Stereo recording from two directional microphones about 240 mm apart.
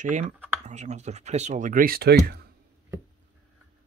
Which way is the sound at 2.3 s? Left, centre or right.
Right.